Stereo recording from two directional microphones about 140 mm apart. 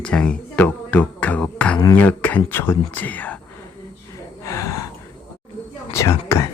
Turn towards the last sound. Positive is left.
turn(degrees=20)  # may be behind; listen again after turning